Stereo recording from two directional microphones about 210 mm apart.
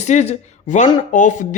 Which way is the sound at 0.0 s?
35° left (ahead or behind).